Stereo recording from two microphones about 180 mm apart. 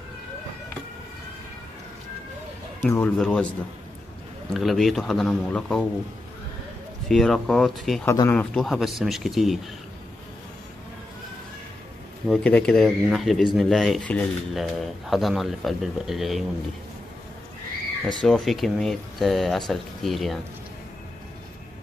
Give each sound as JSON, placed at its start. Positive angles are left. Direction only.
{"t": 2.8, "sound": "a man's voice", "side_deg": 10}
{"t": 4.6, "sound": "speech", "side_deg": 0}
{"t": 7.1, "sound": "speech", "side_deg": 0}
{"t": 8.0, "sound": "speech", "side_deg": 15}
{"t": 12.3, "sound": "speech", "side_deg": 5}
{"t": 18.0, "sound": "speech", "side_deg": 0}